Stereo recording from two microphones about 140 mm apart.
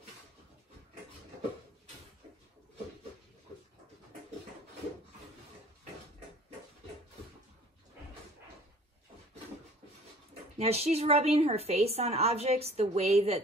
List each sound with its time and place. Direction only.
10.6 s a woman's voice: 50° right (ahead or behind)